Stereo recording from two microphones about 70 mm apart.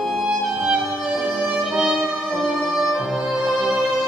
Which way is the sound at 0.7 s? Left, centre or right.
Centre.